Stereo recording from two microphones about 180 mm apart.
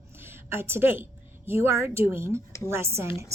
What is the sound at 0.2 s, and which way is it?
A woman's voice, 15° right (ahead or behind).